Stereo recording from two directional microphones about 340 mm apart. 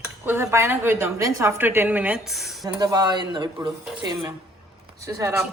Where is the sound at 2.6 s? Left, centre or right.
Centre.